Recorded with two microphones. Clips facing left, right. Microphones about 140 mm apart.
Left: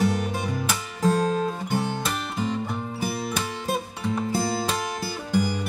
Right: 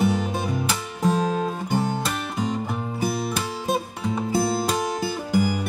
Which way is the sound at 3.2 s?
5° right (ahead or behind).